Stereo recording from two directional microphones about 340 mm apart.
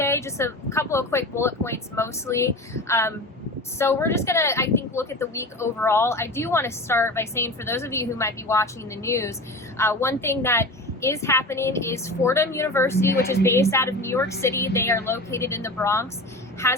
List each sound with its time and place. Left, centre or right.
0.0 s speech: centre